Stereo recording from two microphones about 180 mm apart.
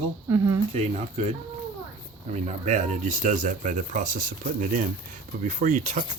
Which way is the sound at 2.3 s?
40° right (ahead or behind).